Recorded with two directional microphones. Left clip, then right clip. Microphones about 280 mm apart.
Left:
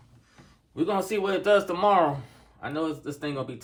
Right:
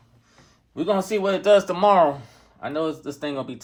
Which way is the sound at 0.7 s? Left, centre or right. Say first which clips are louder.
Right 4 dB; right.